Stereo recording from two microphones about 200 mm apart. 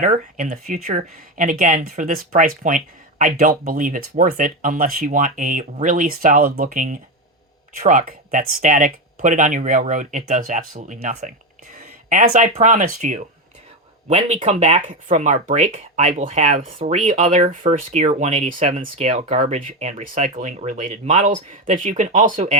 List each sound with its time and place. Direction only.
0.0 s speech: 40° right (ahead or behind)